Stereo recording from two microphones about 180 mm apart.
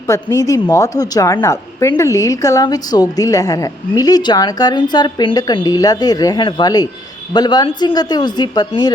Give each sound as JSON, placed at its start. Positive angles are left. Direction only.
{"t": 0.1, "sound": "a woman's voice", "side_deg": 20}